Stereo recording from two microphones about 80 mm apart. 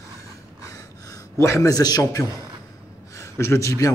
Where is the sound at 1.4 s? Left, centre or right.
Left.